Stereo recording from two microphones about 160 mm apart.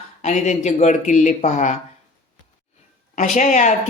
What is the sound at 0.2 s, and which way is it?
Speech, 45° left (ahead or behind).